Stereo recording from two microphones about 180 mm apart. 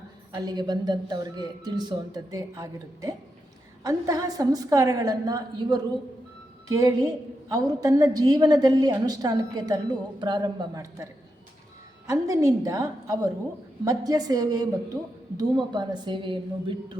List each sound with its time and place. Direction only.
0.3 s a woman's voice: 20° right (ahead or behind)
12.1 s a woman's voice: 20° right (ahead or behind)